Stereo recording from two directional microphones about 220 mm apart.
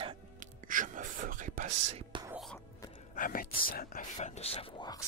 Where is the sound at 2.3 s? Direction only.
Centre (ahead or behind).